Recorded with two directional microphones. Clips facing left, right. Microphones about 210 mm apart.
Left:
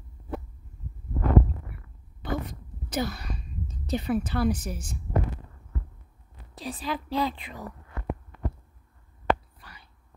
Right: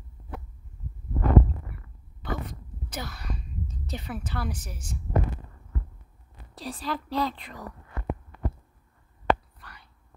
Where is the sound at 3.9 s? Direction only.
20° left (ahead or behind).